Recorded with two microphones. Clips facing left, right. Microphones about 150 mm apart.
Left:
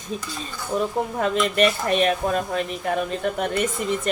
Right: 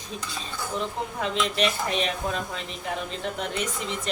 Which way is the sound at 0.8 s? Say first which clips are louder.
Left 8 dB; 50° left (ahead or behind).